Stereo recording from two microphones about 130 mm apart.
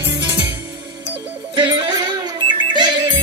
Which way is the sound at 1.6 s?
35° right (ahead or behind).